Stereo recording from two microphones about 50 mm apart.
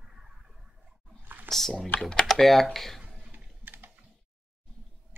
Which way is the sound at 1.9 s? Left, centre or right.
Centre.